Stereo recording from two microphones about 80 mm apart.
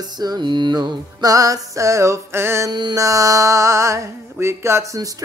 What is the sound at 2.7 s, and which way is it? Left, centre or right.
Mantra, right.